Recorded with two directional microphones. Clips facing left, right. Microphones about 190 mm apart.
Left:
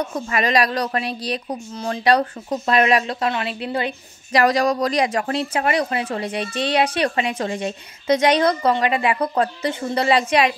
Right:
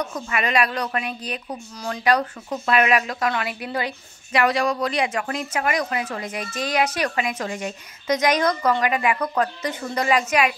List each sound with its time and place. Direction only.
0.0 s speech: 35° left (ahead or behind)
4.3 s a woman's voice: 40° left (ahead or behind)